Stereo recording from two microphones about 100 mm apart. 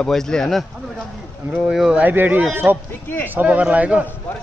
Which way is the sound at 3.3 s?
15° right (ahead or behind).